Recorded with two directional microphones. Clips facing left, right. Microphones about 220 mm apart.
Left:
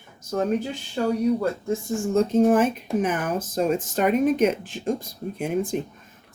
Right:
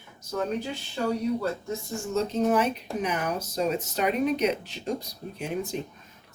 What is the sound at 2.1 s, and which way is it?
Speech, 50° left (ahead or behind).